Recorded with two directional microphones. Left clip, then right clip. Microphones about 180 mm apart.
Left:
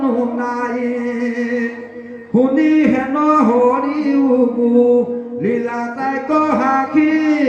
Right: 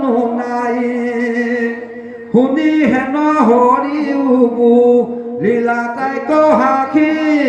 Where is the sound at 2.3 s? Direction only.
45° right (ahead or behind).